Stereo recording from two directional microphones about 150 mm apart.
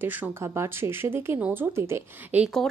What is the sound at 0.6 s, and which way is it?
A woman's voice, 15° right (ahead or behind).